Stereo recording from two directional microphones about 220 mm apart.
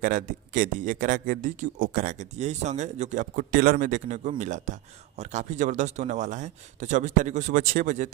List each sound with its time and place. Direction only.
0.0 s a man's voice: 35° right (ahead or behind)